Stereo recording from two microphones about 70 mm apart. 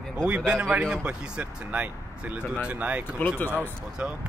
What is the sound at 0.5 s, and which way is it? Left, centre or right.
Speech, centre.